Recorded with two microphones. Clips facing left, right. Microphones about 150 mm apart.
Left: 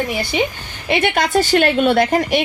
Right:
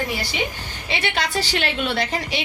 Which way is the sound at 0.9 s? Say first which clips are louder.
Left 8 dB; 50° left (ahead or behind).